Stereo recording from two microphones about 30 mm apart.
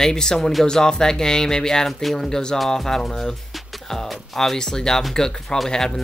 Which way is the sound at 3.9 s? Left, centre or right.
Centre.